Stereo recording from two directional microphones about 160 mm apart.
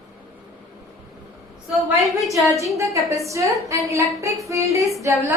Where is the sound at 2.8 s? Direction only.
20° right (ahead or behind).